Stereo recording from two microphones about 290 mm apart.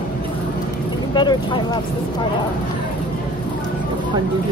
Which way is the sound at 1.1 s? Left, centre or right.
Centre.